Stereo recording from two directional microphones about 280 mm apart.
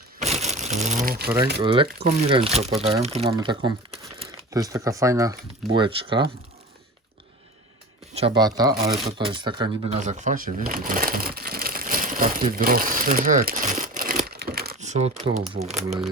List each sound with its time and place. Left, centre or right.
0.2 s a sound: right
1.6 s speech: centre
2.0 s speech: right
8.4 s speech: centre